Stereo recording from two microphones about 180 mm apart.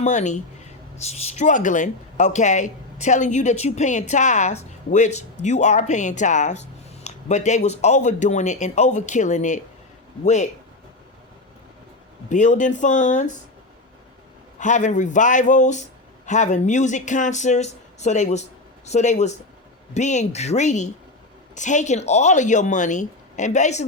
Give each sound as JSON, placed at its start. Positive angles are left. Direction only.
{"t": 0.0, "sound": "speech", "side_deg": 40}
{"t": 12.3, "sound": "speech", "side_deg": 45}
{"t": 14.6, "sound": "speech", "side_deg": 45}